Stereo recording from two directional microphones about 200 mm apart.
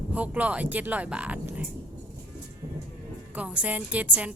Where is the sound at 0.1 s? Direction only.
5° right (ahead or behind).